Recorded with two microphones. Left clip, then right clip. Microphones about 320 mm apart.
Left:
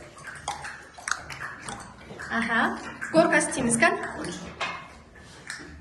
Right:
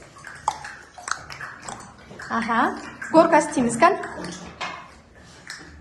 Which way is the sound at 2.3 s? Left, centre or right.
Centre.